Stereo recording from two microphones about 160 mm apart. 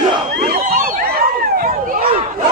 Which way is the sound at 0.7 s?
60° right (ahead or behind).